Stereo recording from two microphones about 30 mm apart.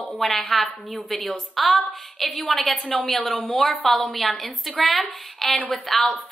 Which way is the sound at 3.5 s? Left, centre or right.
Centre.